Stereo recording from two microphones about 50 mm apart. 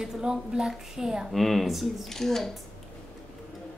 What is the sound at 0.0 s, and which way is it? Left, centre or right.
A woman's voice, centre.